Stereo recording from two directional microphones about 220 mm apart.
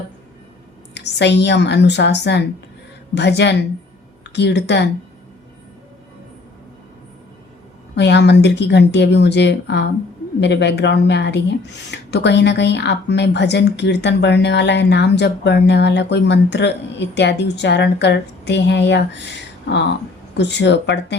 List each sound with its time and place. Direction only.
0.9 s speech: 50° left (ahead or behind)
7.9 s speech: 50° left (ahead or behind)